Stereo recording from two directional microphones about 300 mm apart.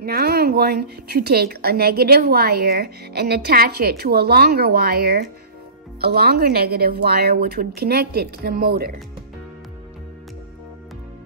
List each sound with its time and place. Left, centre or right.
0.0 s a woman's voice: right